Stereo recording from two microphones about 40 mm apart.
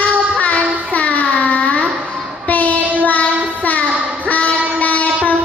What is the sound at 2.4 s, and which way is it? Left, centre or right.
Train, left.